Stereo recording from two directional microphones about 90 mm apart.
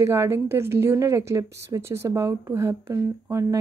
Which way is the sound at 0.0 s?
30° right (ahead or behind).